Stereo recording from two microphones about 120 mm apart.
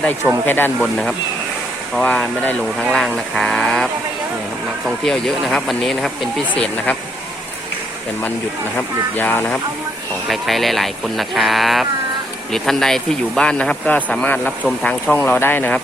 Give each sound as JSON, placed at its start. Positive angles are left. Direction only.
{"t": 0.4, "sound": "speech", "side_deg": 15}
{"t": 2.0, "sound": "speech", "side_deg": 10}
{"t": 4.9, "sound": "speech", "side_deg": 5}
{"t": 6.5, "sound": "speech", "side_deg": 15}
{"t": 9.1, "sound": "speech", "side_deg": 15}
{"t": 10.2, "sound": "speech", "side_deg": 0}